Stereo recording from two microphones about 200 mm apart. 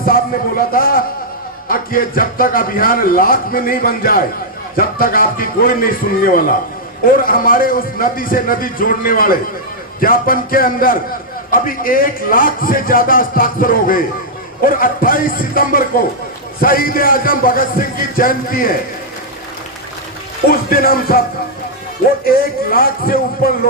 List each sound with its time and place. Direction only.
0.7 s a sound: 45° left (ahead or behind)
1.6 s a man's voice: 45° left (ahead or behind)
20.5 s a man's voice: 50° left (ahead or behind)
22.3 s a man's voice: 45° left (ahead or behind)